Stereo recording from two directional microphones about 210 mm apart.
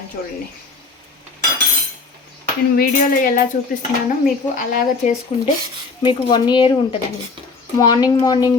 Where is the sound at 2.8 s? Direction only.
40° left (ahead or behind).